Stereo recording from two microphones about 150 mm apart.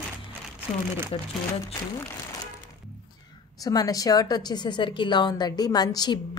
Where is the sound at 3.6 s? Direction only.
25° left (ahead or behind).